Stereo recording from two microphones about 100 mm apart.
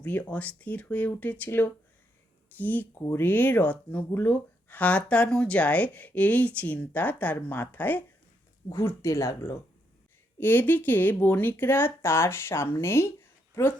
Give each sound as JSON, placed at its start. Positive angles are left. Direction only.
{"t": 0.0, "sound": "speech", "side_deg": 15}
{"t": 8.7, "sound": "speech", "side_deg": 30}